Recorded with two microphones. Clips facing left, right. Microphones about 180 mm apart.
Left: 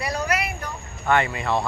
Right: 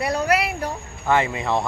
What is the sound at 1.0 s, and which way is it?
Speech, 20° right (ahead or behind).